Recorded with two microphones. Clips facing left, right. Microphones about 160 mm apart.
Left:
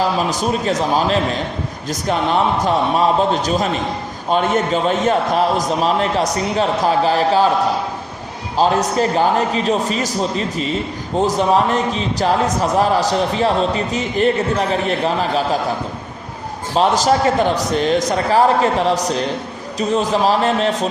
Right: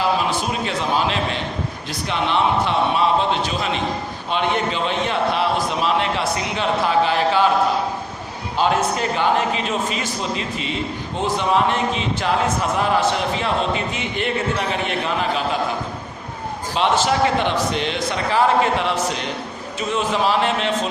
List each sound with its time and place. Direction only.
0.3 s a man's voice: 40° left (ahead or behind)
8.5 s a man's voice: 35° left (ahead or behind)
16.7 s a man's voice: 40° left (ahead or behind)